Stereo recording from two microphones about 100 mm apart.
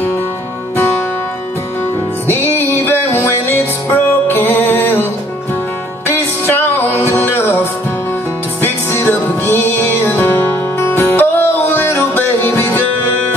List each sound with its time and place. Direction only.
2.2 s music: 25° left (ahead or behind)
6.0 s music: 20° left (ahead or behind)